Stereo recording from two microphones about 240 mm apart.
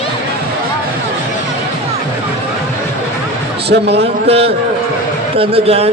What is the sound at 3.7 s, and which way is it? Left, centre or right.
Speech, right.